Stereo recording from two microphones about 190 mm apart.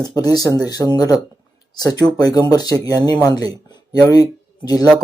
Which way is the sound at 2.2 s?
20° left (ahead or behind).